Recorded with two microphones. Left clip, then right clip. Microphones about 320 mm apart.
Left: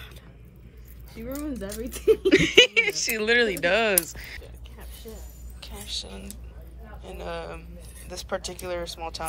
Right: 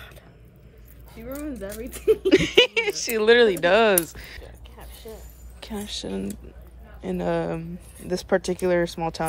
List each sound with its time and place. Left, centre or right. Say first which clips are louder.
1.1 s speech: even; centre
5.6 s speech: right 2 dB; centre